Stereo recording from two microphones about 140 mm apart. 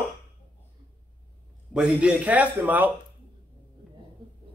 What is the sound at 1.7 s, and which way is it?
Speech, 5° right (ahead or behind).